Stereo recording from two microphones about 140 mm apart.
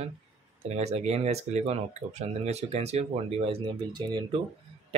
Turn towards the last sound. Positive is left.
turn(degrees=-30)  # may be behind; listen again after turning